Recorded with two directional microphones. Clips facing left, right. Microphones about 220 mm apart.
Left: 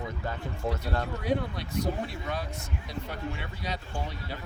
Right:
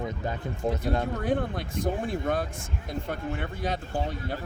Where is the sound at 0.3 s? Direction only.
20° right (ahead or behind).